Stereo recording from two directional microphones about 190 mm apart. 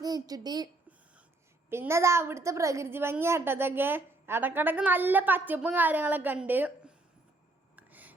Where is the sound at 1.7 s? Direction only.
15° right (ahead or behind).